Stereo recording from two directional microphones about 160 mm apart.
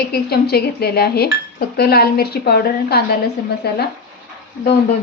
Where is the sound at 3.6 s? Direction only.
90° left.